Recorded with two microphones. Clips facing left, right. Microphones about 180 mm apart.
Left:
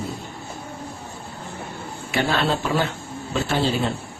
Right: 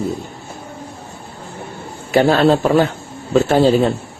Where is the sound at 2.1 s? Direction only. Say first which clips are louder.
Right 10 dB; 40° right (ahead or behind).